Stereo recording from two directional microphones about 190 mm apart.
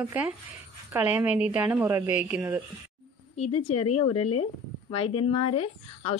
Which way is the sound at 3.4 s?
35° left (ahead or behind).